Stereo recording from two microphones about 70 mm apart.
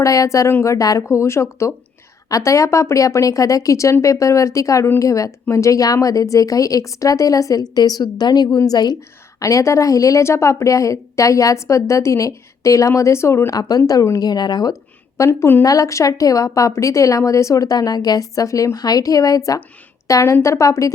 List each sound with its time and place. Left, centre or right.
0.0 s a woman's voice: left
1.0 s a woman's voice: left
7.6 s a woman's voice: left
9.0 s a woman's voice: left
13.6 s speech: left
14.2 s speech: left
15.2 s a woman's voice: left
15.6 s a woman's voice: left
20.1 s a woman's voice: left